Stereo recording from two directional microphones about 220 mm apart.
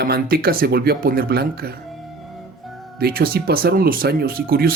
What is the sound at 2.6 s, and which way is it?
Music, centre (ahead or behind).